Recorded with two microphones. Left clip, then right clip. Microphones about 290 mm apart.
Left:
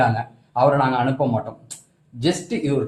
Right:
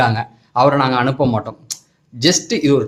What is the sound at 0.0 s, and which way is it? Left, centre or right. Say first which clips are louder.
Speech: right 3 dB; right.